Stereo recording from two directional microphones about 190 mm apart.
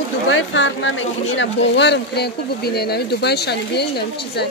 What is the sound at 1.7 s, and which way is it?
Speech, 65° left (ahead or behind).